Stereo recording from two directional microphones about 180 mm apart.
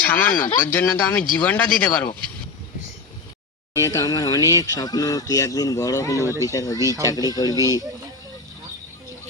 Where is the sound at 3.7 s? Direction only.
15° left (ahead or behind).